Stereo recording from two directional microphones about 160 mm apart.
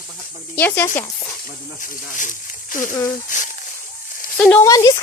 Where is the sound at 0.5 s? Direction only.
15° left (ahead or behind).